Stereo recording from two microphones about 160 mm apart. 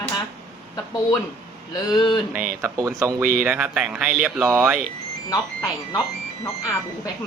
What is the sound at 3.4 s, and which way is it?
Speech, 5° right (ahead or behind).